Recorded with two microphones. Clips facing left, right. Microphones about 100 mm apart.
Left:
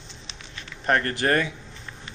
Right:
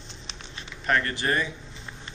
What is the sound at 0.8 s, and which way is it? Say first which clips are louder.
Speech: left 3 dB; 45° left (ahead or behind).